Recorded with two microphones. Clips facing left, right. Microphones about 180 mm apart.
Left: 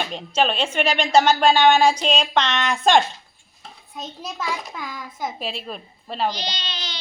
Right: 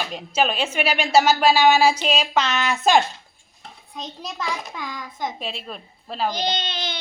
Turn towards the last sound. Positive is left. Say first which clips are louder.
# right 6 dB
turn(degrees=-55)  # may be behind; listen again after turning